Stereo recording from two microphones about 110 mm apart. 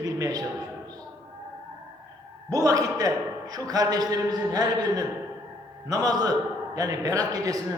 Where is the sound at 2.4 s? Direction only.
30° right (ahead or behind).